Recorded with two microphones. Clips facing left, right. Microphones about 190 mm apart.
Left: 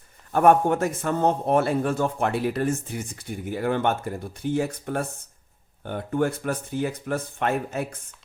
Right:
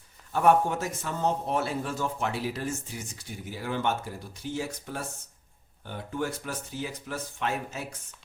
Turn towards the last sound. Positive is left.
turn(degrees=55)  # may be behind; listen again after turning